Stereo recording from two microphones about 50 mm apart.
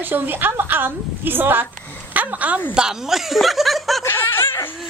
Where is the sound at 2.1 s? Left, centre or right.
Right.